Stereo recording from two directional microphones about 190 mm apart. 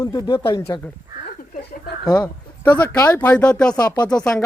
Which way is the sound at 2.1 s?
20° left (ahead or behind).